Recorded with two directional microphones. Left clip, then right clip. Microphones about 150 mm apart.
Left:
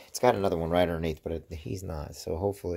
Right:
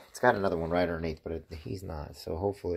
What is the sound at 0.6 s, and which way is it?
Speech, 40° left (ahead or behind).